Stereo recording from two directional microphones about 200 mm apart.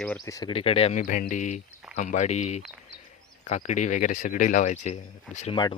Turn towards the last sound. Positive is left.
turn(degrees=35)  # may be behind; listen again after turning